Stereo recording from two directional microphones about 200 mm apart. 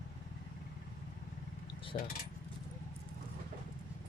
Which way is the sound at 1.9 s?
25° left (ahead or behind).